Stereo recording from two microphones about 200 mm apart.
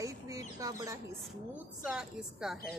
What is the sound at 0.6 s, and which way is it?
Speech, 15° right (ahead or behind).